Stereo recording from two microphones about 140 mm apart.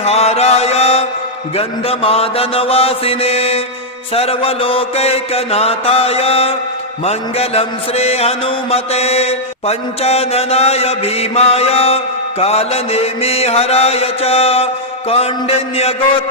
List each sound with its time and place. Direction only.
0.0 s mantra: 50° left (ahead or behind)